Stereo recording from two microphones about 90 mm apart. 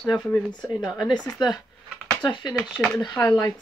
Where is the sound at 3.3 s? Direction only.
35° left (ahead or behind).